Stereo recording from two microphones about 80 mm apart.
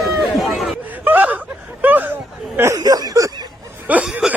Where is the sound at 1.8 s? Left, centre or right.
Right.